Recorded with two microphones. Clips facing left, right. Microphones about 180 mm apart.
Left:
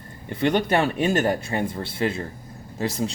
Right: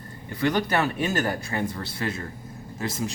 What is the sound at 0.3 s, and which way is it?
Speech, 25° left (ahead or behind).